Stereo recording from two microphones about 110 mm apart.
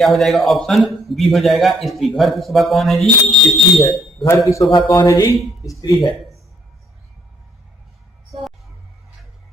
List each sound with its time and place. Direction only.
0.0 s a man's voice: centre (ahead or behind)
4.5 s a man's voice: 30° left (ahead or behind)
4.8 s mantra: 30° left (ahead or behind)
5.7 s a man's voice: 30° left (ahead or behind)
5.9 s speech: centre (ahead or behind)